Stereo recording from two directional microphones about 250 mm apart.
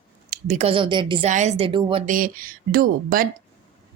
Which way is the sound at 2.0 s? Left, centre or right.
Right.